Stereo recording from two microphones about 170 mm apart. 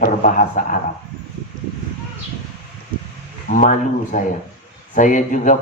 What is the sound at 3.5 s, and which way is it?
Speech, 45° left (ahead or behind).